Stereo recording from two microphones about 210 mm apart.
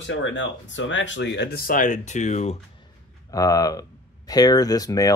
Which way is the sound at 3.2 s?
15° left (ahead or behind).